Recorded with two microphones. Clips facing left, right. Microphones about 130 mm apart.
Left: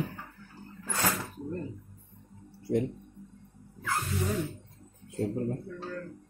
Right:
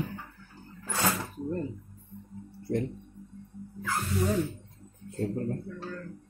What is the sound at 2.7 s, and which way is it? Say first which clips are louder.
Speech: left 2 dB; 5° left (ahead or behind).